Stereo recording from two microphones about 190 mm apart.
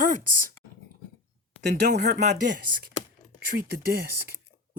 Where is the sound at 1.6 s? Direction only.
60° right (ahead or behind).